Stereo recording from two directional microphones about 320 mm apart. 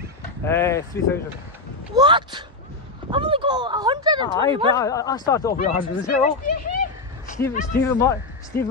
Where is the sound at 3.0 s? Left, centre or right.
Centre.